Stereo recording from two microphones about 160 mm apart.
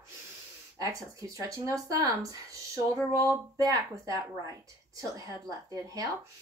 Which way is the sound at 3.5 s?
20° right (ahead or behind).